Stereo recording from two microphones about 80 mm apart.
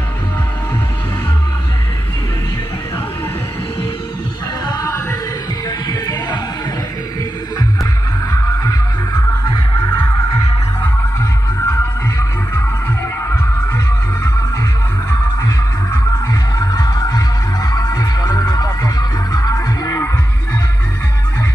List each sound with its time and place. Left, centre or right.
5.9 s music: left
8.5 s music: left
11.1 s music: left
16.5 s music: left